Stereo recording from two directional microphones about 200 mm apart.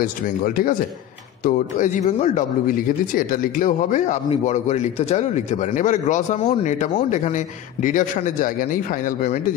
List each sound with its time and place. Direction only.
0.0 s speech: 45° left (ahead or behind)